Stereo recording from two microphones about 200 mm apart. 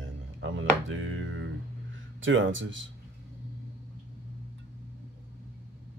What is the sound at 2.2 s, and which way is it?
Speech, 75° right (ahead or behind).